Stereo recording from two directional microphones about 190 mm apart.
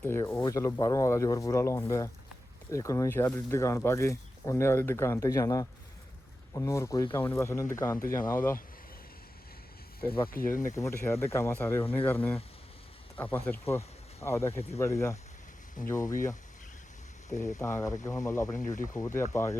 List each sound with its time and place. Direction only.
0.0 s speech: 10° left (ahead or behind)
10.2 s speech: 50° left (ahead or behind)
10.6 s speech: 15° left (ahead or behind)
13.5 s speech: 15° left (ahead or behind)
17.2 s speech: 15° left (ahead or behind)